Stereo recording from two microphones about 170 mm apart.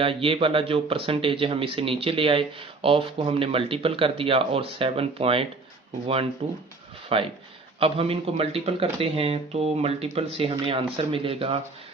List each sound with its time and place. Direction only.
0.0 s speech: 30° right (ahead or behind)